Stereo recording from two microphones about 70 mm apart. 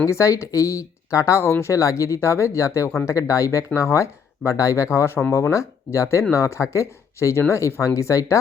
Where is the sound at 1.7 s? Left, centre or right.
Left.